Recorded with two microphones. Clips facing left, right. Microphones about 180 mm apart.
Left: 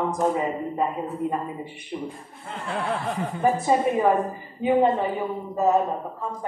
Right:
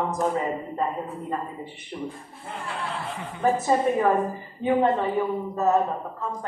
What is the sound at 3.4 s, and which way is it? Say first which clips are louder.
A woman's voice: even; 15° left (ahead or behind).